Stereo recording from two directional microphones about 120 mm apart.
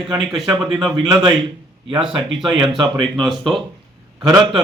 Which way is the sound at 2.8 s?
40° right (ahead or behind).